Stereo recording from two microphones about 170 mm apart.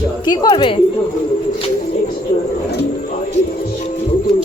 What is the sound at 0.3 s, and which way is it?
Speech, 30° left (ahead or behind).